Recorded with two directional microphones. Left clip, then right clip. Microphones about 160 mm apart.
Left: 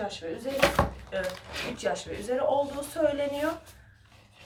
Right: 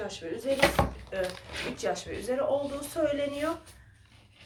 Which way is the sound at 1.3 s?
Centre (ahead or behind).